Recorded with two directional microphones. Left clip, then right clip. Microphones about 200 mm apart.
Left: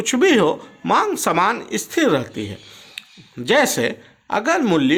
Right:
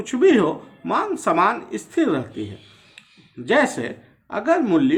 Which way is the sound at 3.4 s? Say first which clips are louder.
Left 3 dB; 45° left (ahead or behind).